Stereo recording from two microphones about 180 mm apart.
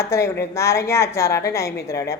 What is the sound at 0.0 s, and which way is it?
A woman's voice, 15° left (ahead or behind).